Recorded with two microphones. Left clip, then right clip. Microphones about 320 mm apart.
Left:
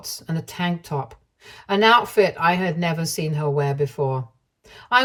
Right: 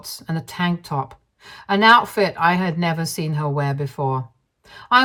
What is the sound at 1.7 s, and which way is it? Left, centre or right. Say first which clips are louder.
Speech: right 3 dB; centre.